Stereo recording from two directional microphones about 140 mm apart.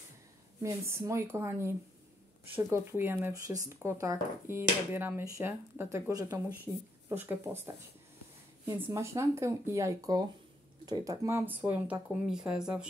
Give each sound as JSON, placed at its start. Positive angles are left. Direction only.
{"t": 0.6, "sound": "speech", "side_deg": -20}
{"t": 8.7, "sound": "speech", "side_deg": -15}